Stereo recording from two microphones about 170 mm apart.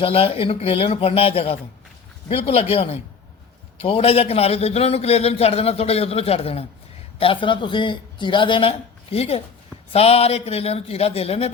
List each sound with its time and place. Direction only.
0.0 s a man's voice: 35° left (ahead or behind)